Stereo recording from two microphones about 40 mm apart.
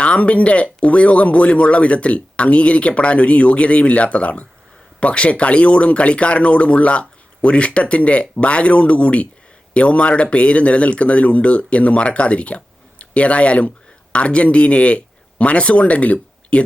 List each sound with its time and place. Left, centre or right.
0.0 s speech: left